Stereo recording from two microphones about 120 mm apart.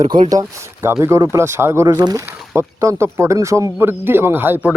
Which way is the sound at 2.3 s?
20° right (ahead or behind).